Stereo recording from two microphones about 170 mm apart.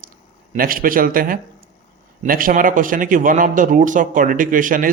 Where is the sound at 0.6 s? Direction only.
55° right (ahead or behind).